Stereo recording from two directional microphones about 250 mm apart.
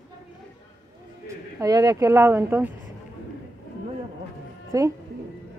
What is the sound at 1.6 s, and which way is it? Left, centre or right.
Speech, centre.